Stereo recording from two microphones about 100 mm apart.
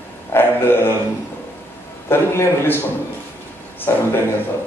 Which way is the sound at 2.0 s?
25° left (ahead or behind).